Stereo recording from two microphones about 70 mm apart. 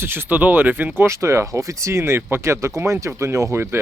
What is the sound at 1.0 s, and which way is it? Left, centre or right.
Speech, right.